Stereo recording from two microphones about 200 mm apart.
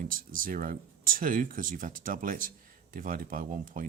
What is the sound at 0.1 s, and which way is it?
Speech, 45° right (ahead or behind).